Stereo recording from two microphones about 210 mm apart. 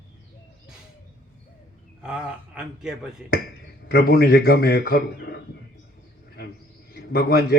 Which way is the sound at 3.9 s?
50° left (ahead or behind).